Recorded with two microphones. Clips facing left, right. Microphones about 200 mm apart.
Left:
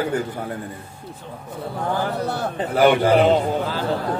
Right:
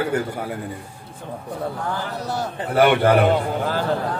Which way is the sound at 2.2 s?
55° left (ahead or behind).